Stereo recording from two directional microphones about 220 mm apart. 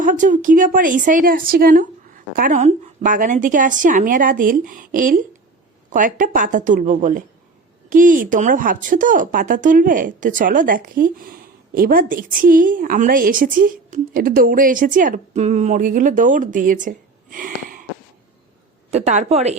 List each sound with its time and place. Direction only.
0.0 s speech: 35° right (ahead or behind)
18.9 s a woman's voice: 30° right (ahead or behind)